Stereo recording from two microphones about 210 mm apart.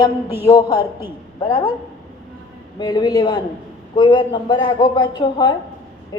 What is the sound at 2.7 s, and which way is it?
A man's voice, 20° left (ahead or behind).